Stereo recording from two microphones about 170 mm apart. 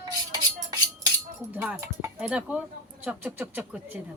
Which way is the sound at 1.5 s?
10° right (ahead or behind).